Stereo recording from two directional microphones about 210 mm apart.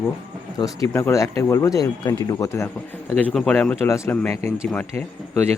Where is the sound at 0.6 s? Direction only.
15° left (ahead or behind).